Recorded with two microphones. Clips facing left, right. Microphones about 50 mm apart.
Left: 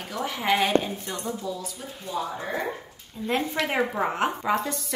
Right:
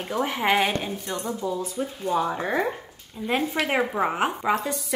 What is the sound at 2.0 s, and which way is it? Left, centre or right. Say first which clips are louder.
Speech: right 5 dB; right.